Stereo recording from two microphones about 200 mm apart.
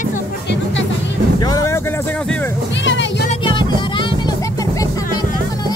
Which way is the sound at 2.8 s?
65° left (ahead or behind).